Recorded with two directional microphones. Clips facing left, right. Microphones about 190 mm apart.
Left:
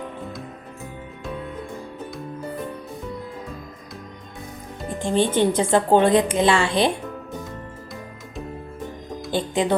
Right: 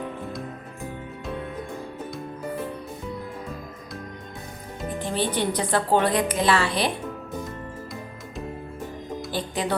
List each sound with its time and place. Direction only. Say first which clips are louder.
4.9 s speech: left 6 dB; 5° right (ahead or behind)
5.5 s a woman's voice: left 5 dB; 25° left (ahead or behind)
9.3 s speech: left 6 dB; 25° left (ahead or behind)